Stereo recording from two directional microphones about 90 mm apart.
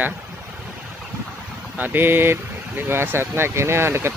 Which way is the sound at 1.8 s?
20° right (ahead or behind).